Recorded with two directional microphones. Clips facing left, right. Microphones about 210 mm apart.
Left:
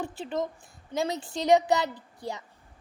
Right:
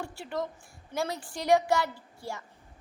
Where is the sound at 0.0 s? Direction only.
20° left (ahead or behind).